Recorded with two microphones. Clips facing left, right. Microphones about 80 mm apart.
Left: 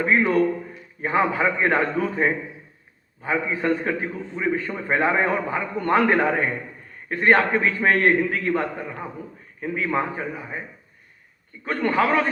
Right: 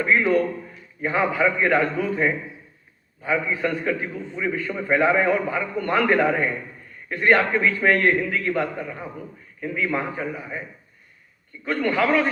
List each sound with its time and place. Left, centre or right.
0.0 s a man's voice: left
11.6 s a man's voice: left